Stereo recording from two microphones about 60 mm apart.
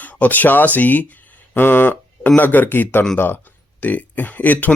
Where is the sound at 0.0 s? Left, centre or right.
Left.